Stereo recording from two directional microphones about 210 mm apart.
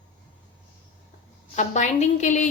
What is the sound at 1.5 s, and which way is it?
Speech, 35° left (ahead or behind).